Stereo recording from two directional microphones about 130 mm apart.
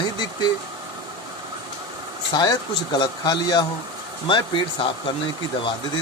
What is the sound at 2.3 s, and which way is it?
Speech, 30° left (ahead or behind).